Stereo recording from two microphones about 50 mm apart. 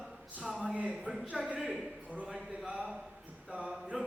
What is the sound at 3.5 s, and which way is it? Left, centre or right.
Speech, right.